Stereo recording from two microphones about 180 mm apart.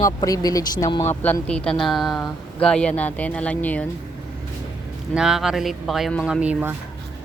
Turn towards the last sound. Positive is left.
turn(degrees=-10)  # may be behind; listen again after turning